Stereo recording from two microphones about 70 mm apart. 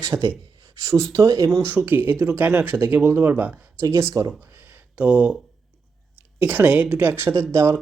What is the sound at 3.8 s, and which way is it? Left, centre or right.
Speech, right.